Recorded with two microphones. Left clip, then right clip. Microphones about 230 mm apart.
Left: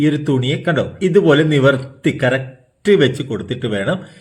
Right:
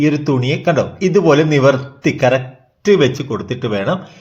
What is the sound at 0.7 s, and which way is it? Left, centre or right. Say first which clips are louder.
Speech: right 1 dB; right.